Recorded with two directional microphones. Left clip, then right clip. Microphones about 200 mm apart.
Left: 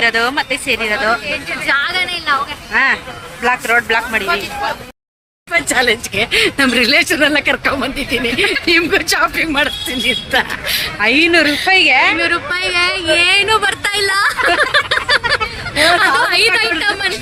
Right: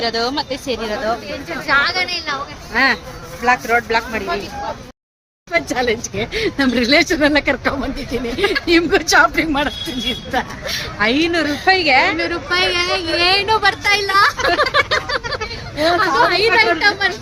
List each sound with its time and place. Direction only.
0.0 s speech: 5° left (ahead or behind)
2.7 s speech: 10° left (ahead or behind)
5.5 s speech: 10° right (ahead or behind)
8.4 s speech: 15° left (ahead or behind)
8.6 s speech: 20° right (ahead or behind)
11.0 s a woman's voice: 15° left (ahead or behind)
12.1 s speech: 10° right (ahead or behind)
14.6 s a sound: centre (ahead or behind)
16.0 s speech: 10° right (ahead or behind)